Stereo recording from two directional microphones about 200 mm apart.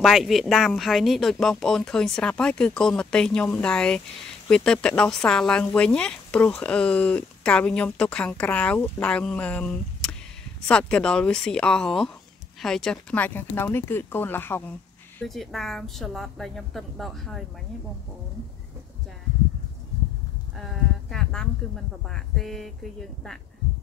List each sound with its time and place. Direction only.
0.0 s speech: centre (ahead or behind)
21.1 s speech: 5° left (ahead or behind)